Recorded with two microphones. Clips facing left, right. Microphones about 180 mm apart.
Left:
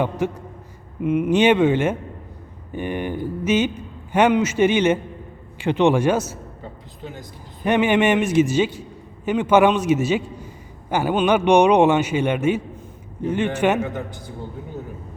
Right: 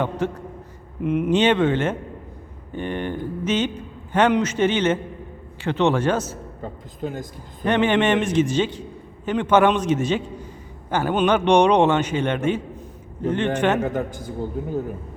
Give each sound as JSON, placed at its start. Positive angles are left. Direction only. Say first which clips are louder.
{"t": 0.0, "sound": "a man's voice", "louder": "left 1 dB", "side_deg": 10}
{"t": 6.6, "sound": "a sound", "louder": "right 6 dB", "side_deg": -45}
{"t": 7.6, "sound": "a man's voice", "louder": "left 1 dB", "side_deg": 10}
{"t": 13.8, "sound": "a man's voice", "louder": "right 4 dB", "side_deg": -45}